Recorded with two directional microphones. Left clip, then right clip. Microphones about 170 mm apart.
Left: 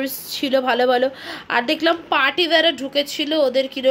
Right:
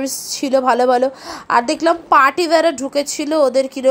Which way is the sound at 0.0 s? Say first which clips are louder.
Right 2 dB; 25° right (ahead or behind).